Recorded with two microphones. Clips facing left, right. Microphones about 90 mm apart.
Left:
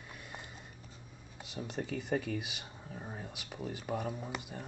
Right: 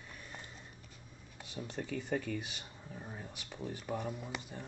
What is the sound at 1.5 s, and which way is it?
Speech, 15° left (ahead or behind).